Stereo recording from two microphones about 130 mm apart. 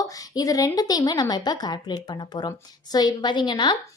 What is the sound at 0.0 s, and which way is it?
A woman's voice, 25° left (ahead or behind).